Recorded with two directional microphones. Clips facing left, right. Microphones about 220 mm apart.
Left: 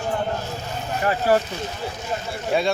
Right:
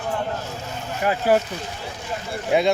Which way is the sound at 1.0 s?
15° right (ahead or behind).